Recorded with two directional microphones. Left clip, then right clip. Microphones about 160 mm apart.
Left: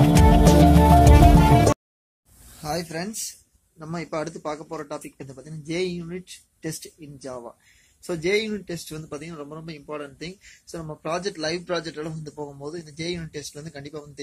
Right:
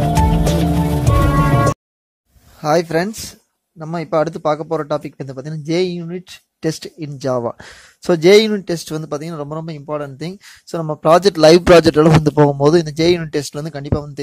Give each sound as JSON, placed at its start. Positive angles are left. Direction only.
{"t": 0.0, "sound": "music", "side_deg": 0}
{"t": 2.6, "sound": "speech", "side_deg": -50}
{"t": 3.8, "sound": "speech", "side_deg": -40}